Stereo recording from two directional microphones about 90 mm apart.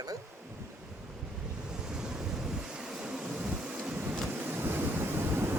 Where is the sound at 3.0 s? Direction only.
10° right (ahead or behind).